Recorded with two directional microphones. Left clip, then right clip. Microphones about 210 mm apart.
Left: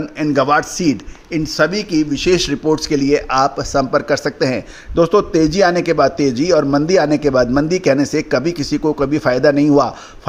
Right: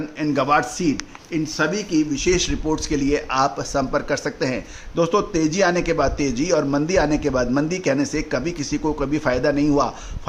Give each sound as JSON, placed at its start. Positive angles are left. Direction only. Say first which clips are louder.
{"t": 0.2, "sound": "a man's voice", "louder": "left 5 dB", "side_deg": 30}